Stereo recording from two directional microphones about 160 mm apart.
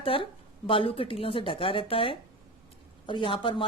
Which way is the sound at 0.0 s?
35° left (ahead or behind).